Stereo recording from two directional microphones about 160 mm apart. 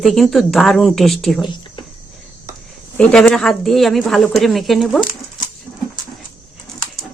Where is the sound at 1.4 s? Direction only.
30° left (ahead or behind).